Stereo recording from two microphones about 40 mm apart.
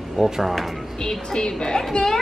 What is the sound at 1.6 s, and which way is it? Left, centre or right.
Speech, centre.